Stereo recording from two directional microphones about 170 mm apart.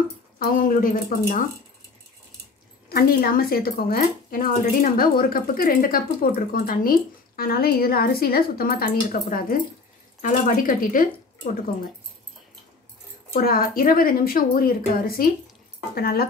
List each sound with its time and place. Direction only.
0.4 s speech: 55° left (ahead or behind)
2.9 s speech: 60° left (ahead or behind)
13.4 s speech: 60° left (ahead or behind)